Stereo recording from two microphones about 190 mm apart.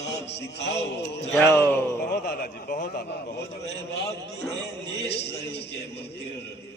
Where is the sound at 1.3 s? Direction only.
10° left (ahead or behind).